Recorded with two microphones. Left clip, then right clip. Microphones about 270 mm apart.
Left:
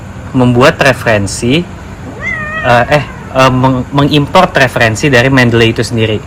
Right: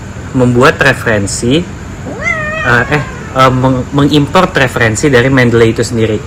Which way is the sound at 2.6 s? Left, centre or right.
Left.